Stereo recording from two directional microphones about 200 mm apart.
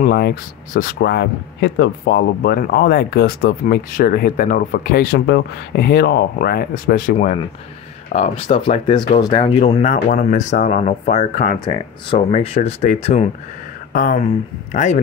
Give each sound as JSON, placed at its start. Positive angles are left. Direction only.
{"t": 0.0, "sound": "speech", "side_deg": 50}
{"t": 10.0, "sound": "speech", "side_deg": 40}
{"t": 13.9, "sound": "speech", "side_deg": 45}